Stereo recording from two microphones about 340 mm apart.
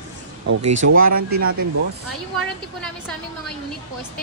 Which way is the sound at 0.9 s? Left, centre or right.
Right.